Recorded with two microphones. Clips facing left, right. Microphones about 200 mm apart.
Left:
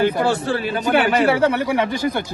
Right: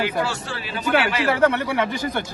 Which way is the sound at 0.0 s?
55° left (ahead or behind).